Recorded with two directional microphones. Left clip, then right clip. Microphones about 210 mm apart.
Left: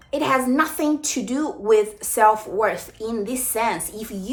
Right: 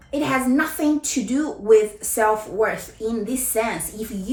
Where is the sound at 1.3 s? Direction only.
30° left (ahead or behind).